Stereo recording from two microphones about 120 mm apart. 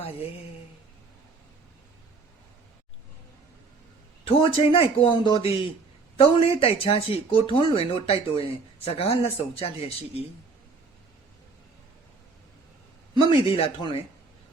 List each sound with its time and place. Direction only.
4.3 s speech: 50° left (ahead or behind)
13.3 s speech: 40° left (ahead or behind)